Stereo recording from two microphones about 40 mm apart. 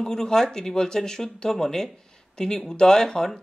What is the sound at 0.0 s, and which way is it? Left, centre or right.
Speech, centre.